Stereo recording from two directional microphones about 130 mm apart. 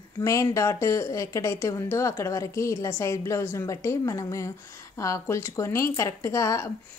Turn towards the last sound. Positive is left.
turn(degrees=25)  # may be behind; listen again after turning